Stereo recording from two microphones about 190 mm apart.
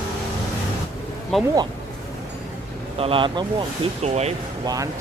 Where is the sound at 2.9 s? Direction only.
30° right (ahead or behind).